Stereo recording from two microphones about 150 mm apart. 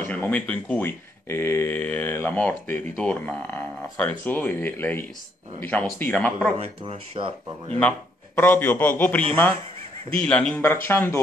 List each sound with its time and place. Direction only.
0.0 s speech: 10° left (ahead or behind)
6.8 s speech: 35° right (ahead or behind)
8.4 s speech: 15° left (ahead or behind)